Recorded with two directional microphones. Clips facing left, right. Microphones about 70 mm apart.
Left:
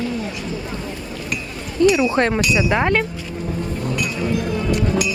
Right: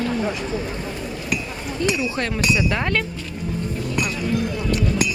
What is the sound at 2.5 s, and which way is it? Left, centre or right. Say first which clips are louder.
Speech: left 4 dB; left.